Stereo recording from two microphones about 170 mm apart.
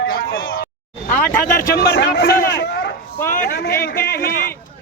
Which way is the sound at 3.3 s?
65° left (ahead or behind).